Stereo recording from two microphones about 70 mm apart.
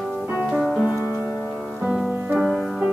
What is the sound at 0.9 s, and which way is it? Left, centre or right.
Music, left.